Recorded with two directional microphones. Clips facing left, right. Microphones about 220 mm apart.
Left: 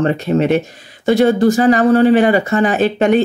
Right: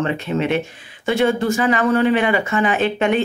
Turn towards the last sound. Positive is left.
turn(degrees=40)  # may be behind; listen again after turning